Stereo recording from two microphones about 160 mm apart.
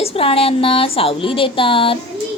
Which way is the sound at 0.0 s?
35° left (ahead or behind).